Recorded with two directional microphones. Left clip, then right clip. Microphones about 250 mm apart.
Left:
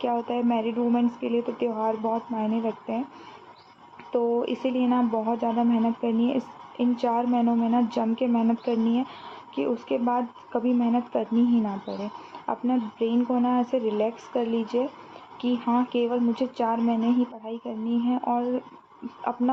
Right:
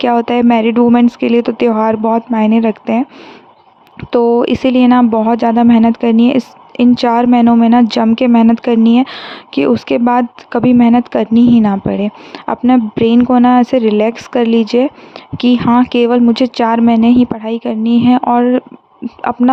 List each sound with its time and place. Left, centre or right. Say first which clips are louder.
0.0 s speech: right 15 dB; right
4.1 s speech: right 14 dB; right